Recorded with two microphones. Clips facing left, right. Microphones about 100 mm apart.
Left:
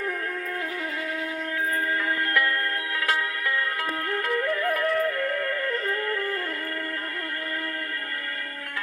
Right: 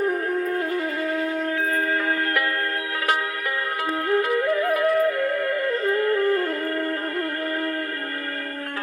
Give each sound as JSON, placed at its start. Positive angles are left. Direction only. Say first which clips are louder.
{"t": 0.1, "sound": "music", "louder": "right 7 dB", "side_deg": -40}
{"t": 1.9, "sound": "music", "louder": "right 3 dB", "side_deg": -20}
{"t": 4.1, "sound": "music", "louder": "right 6 dB", "side_deg": -15}